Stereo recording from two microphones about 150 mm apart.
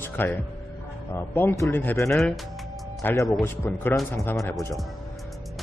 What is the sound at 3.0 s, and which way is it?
Speech, 15° left (ahead or behind).